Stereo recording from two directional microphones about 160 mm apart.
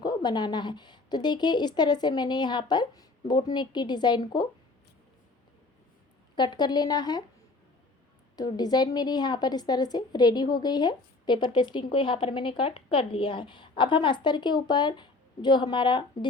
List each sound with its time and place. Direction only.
0.0 s a woman's voice: 25° left (ahead or behind)
6.3 s a woman's voice: 30° left (ahead or behind)
8.4 s a woman's voice: 25° left (ahead or behind)